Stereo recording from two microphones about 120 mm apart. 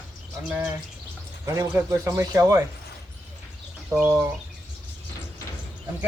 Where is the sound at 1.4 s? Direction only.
25° right (ahead or behind).